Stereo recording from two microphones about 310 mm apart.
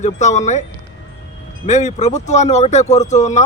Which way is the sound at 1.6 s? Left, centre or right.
Left.